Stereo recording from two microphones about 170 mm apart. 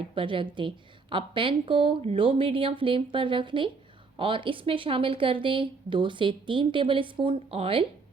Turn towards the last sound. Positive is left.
turn(degrees=-35)  # may be behind; listen again after turning